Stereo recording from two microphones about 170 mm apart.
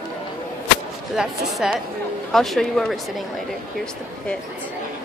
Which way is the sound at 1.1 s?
5° right (ahead or behind).